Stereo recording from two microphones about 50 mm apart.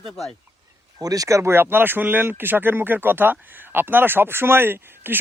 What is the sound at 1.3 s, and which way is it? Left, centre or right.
Speech, right.